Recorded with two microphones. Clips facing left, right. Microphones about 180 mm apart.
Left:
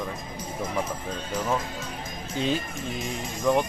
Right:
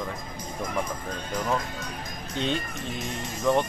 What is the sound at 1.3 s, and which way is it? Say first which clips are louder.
Speech: even; 5° left (ahead or behind).